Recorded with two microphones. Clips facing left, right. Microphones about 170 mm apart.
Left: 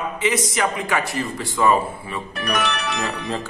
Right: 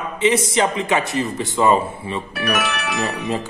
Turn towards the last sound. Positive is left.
turn(degrees=-10)  # may be behind; listen again after turning